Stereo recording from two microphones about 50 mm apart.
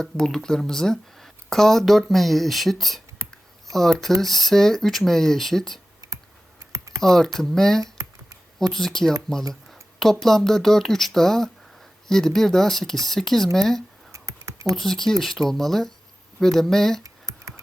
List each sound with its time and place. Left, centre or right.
0.0 s speech: centre
6.7 s typing: right
7.0 s speech: centre
14.1 s a sound: right
14.7 s speech: centre